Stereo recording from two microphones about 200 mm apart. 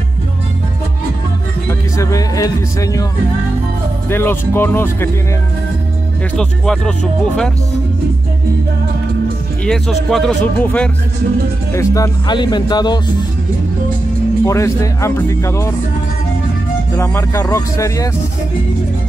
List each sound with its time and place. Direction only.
1.7 s music: 15° left (ahead or behind)
4.1 s speech: 10° left (ahead or behind)
6.3 s speech: 5° left (ahead or behind)
9.7 s speech: centre (ahead or behind); by 13.0 s 20° left (ahead or behind)
14.4 s speech: 15° left (ahead or behind)
16.9 s speech: 10° left (ahead or behind)